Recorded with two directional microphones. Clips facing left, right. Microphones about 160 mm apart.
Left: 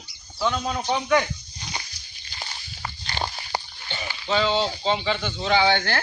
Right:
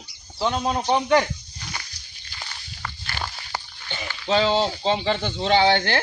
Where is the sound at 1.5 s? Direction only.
20° left (ahead or behind).